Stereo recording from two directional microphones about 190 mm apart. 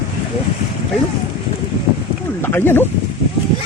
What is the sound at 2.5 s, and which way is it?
Speech, 10° left (ahead or behind).